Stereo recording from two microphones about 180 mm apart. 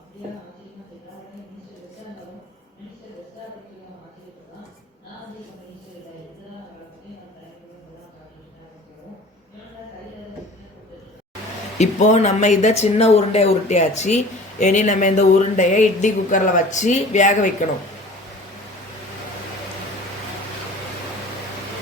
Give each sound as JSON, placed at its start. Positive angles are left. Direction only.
{"t": 11.8, "sound": "speech", "side_deg": 40}